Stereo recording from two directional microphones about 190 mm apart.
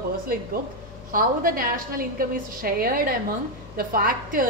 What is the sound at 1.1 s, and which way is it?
A woman's voice, 50° right (ahead or behind).